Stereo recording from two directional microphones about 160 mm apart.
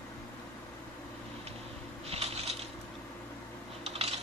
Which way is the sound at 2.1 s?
40° right (ahead or behind).